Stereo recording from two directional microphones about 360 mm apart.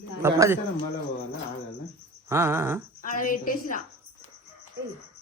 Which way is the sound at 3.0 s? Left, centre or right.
Left.